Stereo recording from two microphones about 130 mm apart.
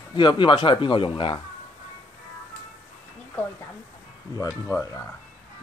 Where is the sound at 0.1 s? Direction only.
35° left (ahead or behind).